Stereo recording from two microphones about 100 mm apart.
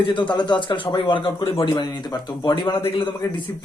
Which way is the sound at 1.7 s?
50° left (ahead or behind).